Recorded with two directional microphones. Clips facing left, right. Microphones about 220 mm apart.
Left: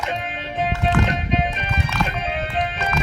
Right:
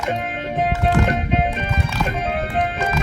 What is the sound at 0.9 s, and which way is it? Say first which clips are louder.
Music: right 1 dB; 55° right (ahead or behind).